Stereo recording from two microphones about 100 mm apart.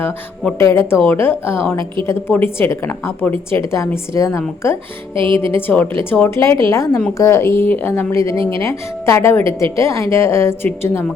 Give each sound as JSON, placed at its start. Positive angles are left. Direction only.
{"t": 0.6, "sound": "a woman's voice", "side_deg": 25}
{"t": 5.1, "sound": "speech", "side_deg": -60}
{"t": 5.5, "sound": "a woman's voice", "side_deg": 20}
{"t": 8.4, "sound": "speech", "side_deg": -55}
{"t": 8.6, "sound": "a woman's voice", "side_deg": 30}